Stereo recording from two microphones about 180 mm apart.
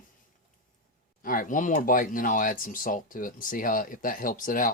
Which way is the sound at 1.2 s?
50° left (ahead or behind).